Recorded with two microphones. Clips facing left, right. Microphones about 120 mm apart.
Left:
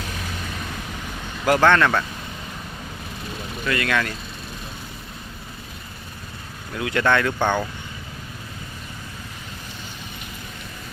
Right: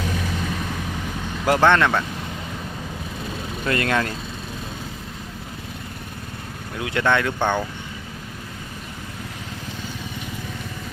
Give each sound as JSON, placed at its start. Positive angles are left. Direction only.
{"t": 1.5, "sound": "speech", "side_deg": -20}
{"t": 3.7, "sound": "speech", "side_deg": -35}
{"t": 6.7, "sound": "speech", "side_deg": -20}